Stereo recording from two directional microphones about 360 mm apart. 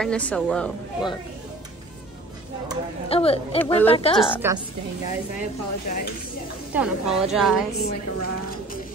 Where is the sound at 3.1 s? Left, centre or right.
Centre.